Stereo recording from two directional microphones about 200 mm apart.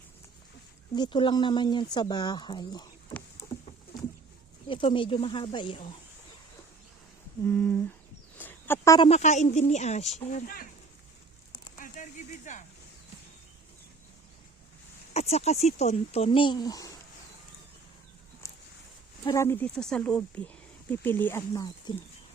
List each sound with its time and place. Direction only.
0.9 s speech: 20° left (ahead or behind)
4.7 s speech: 25° left (ahead or behind)
7.4 s speech: 5° left (ahead or behind)
8.4 s a sound: 10° left (ahead or behind)
9.0 s speech: 35° left (ahead or behind)
10.3 s speech: 45° left (ahead or behind)
11.8 s a sound: 40° left (ahead or behind)
15.1 s speech: 30° left (ahead or behind)
19.2 s speech: 15° left (ahead or behind)